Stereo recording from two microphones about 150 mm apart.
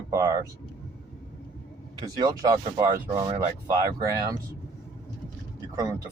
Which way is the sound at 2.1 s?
30° right (ahead or behind).